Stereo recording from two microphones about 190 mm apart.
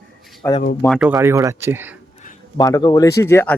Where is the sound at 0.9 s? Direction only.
5° right (ahead or behind).